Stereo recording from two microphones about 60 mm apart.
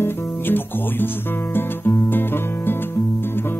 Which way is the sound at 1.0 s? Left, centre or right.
Left.